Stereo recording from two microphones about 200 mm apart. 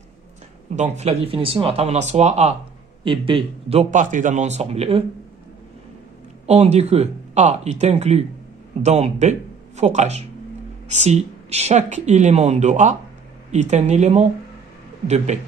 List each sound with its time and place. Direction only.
0.7 s a man's voice: 35° right (ahead or behind)
6.4 s a man's voice: 30° right (ahead or behind)